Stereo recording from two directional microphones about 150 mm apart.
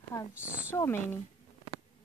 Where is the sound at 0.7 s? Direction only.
15° left (ahead or behind).